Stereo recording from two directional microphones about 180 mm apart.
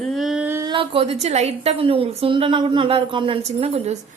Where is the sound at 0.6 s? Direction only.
30° right (ahead or behind).